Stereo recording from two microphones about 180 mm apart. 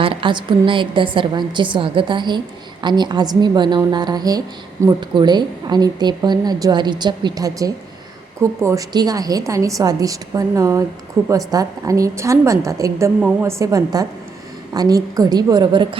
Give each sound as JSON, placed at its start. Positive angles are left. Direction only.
{"t": 0.0, "sound": "a woman's voice", "side_deg": -30}